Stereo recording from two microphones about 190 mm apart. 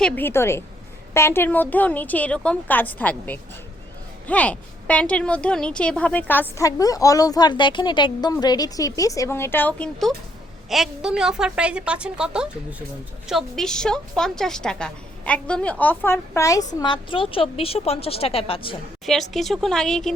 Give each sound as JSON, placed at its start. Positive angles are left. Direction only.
{"t": 0.0, "sound": "a woman's voice", "side_deg": 10}
{"t": 19.0, "sound": "a woman's voice", "side_deg": 0}